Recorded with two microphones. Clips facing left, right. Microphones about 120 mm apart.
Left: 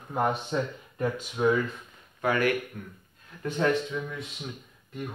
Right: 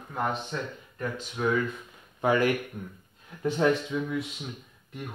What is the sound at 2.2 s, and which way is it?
Speech, 20° right (ahead or behind).